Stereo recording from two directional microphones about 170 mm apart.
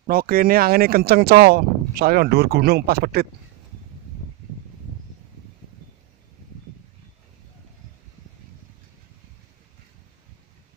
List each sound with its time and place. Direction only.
0.0 s speech: 60° right (ahead or behind)